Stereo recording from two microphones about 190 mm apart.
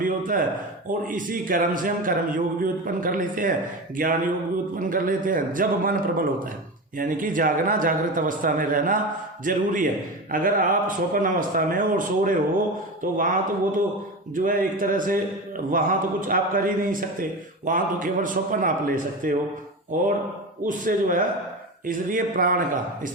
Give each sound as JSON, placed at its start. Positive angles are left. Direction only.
{"t": 0.0, "sound": "a sound", "side_deg": -45}
{"t": 0.9, "sound": "a man's voice", "side_deg": -45}
{"t": 20.7, "sound": "a man's voice", "side_deg": -45}